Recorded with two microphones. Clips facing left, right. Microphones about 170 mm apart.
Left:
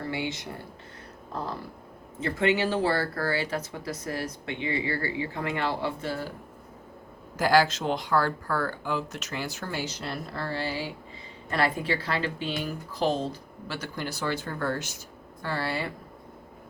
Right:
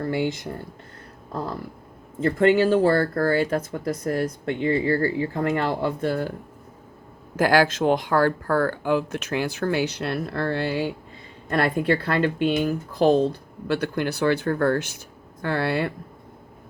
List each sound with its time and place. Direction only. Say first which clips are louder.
0.0 s speech: right 7 dB; 50° right (ahead or behind)
2.2 s speech: right 7 dB; 50° right (ahead or behind)
7.3 s speech: right 3 dB; 55° right (ahead or behind)